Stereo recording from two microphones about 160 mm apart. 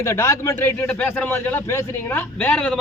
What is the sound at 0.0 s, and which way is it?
A man's voice, 20° left (ahead or behind).